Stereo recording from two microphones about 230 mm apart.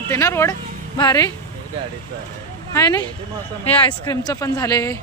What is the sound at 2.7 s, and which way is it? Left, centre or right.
Speech, centre.